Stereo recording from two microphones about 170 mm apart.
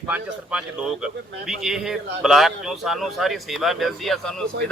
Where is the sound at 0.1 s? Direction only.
5° right (ahead or behind).